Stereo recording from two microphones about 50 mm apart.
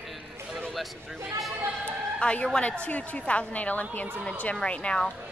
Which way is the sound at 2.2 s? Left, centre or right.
Left.